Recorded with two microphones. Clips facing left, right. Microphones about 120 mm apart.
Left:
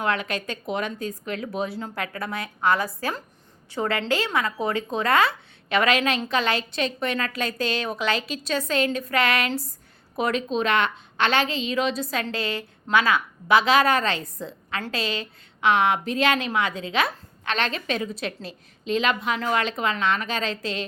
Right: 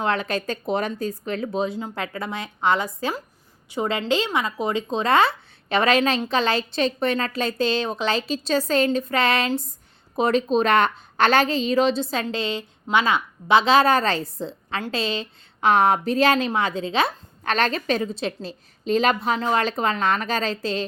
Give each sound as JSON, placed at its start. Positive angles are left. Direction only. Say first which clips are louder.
{"t": 0.0, "sound": "a woman's voice", "louder": "right 2 dB", "side_deg": -30}
{"t": 1.6, "sound": "a woman's voice", "louder": "right 3 dB", "side_deg": -20}
{"t": 15.7, "sound": "a woman's voice", "louder": "right 4 dB", "side_deg": -40}
{"t": 18.4, "sound": "a woman's voice", "louder": "right 4 dB", "side_deg": -40}